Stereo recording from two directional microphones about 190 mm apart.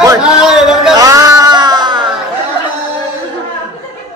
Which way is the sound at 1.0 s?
15° right (ahead or behind).